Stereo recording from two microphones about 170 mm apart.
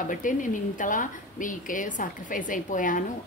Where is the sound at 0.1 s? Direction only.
50° left (ahead or behind).